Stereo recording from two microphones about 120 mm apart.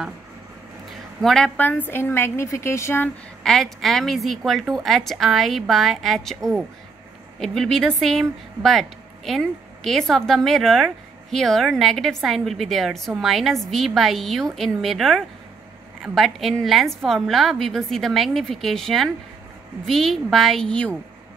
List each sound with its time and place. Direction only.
1.2 s a woman's voice: 5° left (ahead or behind); by 3.1 s 20° left (ahead or behind)
3.4 s speech: centre (ahead or behind)
7.3 s speech: 5° left (ahead or behind)